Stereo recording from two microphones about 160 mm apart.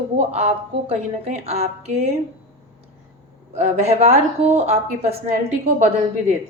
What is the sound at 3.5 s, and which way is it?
A woman's voice, 45° right (ahead or behind).